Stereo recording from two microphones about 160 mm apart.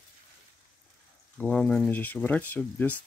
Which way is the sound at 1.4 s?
5° left (ahead or behind).